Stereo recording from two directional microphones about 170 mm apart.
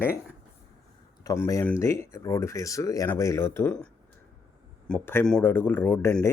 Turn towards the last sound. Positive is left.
turn(degrees=15)  # may be behind; listen again after turning